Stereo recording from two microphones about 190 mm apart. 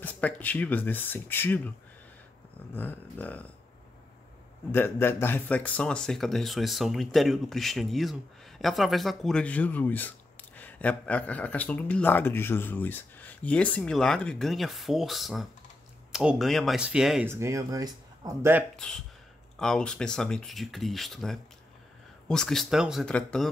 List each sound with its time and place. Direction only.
0.0 s speech: 10° left (ahead or behind)
2.7 s speech: 10° left (ahead or behind)
4.7 s speech: 10° left (ahead or behind); by 17.3 s 5° right (ahead or behind)
17.3 s speech: 15° right (ahead or behind)
19.6 s speech: 5° left (ahead or behind)